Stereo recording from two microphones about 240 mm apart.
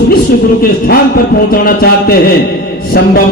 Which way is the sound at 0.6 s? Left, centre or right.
Left.